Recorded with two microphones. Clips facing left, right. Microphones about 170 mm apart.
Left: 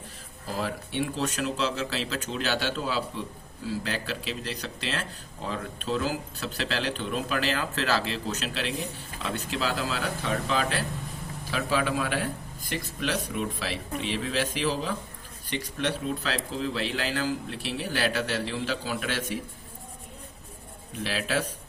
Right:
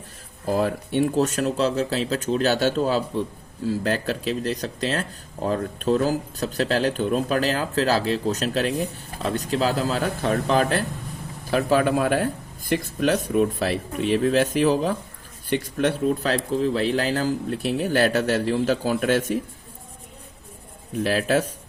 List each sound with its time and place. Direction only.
0.4 s speech: 50° right (ahead or behind)
21.0 s speech: 45° right (ahead or behind)